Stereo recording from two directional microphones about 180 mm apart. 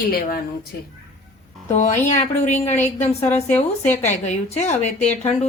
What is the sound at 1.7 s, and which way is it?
Speech, 40° left (ahead or behind).